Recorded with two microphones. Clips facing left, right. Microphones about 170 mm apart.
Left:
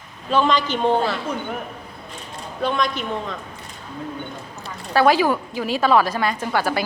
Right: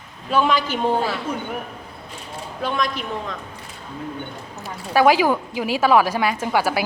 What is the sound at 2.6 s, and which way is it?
Speech, centre (ahead or behind).